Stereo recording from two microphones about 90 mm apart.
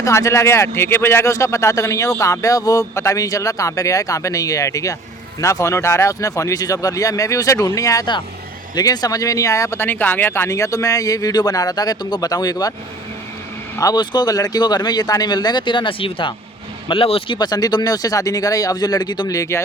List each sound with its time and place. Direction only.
0.0 s speech: 35° left (ahead or behind)
13.9 s speech: 55° left (ahead or behind); by 16.3 s 80° left
16.9 s speech: 90° left; by 19.3 s 50° left (ahead or behind)
19.3 s speech: 35° left (ahead or behind)